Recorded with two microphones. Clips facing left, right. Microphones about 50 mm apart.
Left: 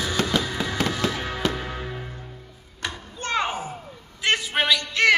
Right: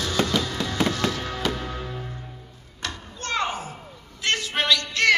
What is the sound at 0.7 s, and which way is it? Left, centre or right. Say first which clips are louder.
Music: right 2 dB; centre.